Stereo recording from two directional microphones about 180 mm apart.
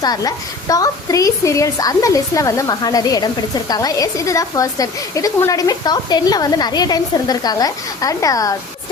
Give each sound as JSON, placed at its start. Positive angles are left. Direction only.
{"t": 0.0, "sound": "a woman's voice", "side_deg": 20}